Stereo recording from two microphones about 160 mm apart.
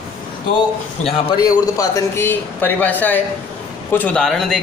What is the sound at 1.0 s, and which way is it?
Speech, 35° left (ahead or behind).